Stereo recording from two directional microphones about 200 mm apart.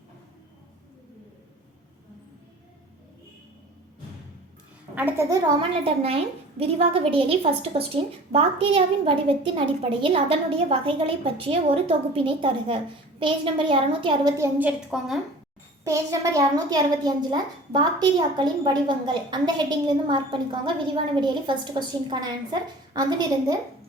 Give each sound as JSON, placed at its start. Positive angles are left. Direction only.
{"t": 4.9, "sound": "a woman's voice", "side_deg": -10}
{"t": 5.5, "sound": "a woman's voice", "side_deg": -30}
{"t": 15.8, "sound": "a woman's voice", "side_deg": -15}